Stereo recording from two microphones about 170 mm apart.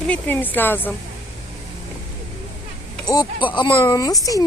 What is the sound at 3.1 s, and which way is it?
Speech, 25° left (ahead or behind).